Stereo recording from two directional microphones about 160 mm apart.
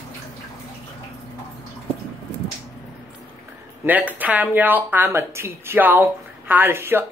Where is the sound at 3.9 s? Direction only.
10° right (ahead or behind).